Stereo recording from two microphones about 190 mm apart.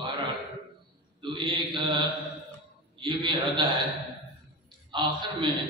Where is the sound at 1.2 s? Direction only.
25° right (ahead or behind).